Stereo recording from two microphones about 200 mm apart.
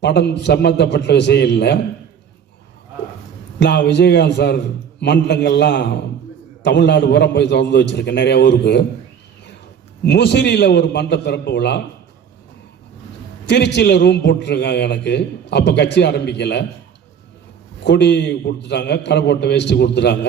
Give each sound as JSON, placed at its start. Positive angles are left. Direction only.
{"t": 0.0, "sound": "a man's voice", "side_deg": 60}
{"t": 3.6, "sound": "a man's voice", "side_deg": 60}
{"t": 10.1, "sound": "a man's voice", "side_deg": 60}
{"t": 13.5, "sound": "a man's voice", "side_deg": 60}
{"t": 17.8, "sound": "a man's voice", "side_deg": 60}